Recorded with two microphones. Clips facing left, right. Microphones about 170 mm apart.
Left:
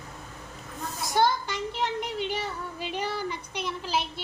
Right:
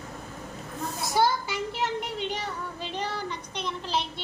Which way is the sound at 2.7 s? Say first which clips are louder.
Left 3 dB; 10° left (ahead or behind).